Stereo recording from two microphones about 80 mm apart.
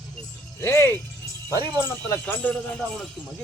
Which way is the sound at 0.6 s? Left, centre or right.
Left.